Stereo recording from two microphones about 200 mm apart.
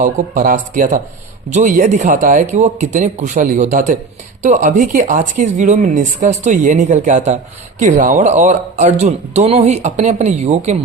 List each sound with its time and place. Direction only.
0.0 s speech: 40° right (ahead or behind)